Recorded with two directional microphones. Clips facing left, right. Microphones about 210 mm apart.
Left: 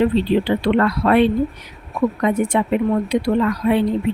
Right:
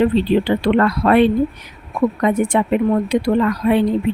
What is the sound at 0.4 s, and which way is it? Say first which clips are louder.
Speech: right 1 dB; 50° right (ahead or behind).